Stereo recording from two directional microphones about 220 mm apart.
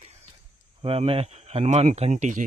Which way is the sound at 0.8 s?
25° right (ahead or behind).